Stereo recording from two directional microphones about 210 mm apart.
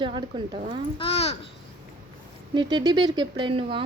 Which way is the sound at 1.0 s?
30° left (ahead or behind).